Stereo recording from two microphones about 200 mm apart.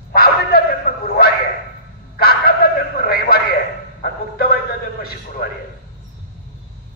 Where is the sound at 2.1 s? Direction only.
50° left (ahead or behind).